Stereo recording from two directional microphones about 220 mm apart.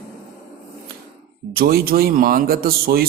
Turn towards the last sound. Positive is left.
turn(degrees=-45)  # may be behind; listen again after turning